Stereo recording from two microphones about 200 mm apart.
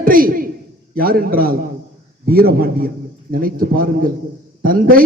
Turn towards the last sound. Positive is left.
turn(degrees=-45)  # may be behind; listen again after turning